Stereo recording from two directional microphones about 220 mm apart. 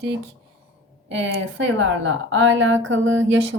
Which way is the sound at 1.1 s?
55° right (ahead or behind).